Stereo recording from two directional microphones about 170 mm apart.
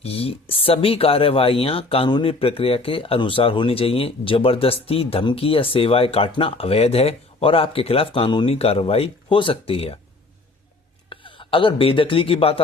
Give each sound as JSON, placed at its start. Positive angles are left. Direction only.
{"t": 0.0, "sound": "speech", "side_deg": 35}
{"t": 11.1, "sound": "a man's voice", "side_deg": 30}